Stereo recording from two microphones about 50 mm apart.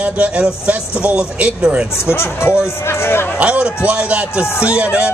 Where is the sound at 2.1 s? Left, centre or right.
Left.